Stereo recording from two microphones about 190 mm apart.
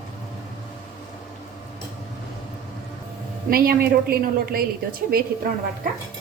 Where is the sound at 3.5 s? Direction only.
50° right (ahead or behind).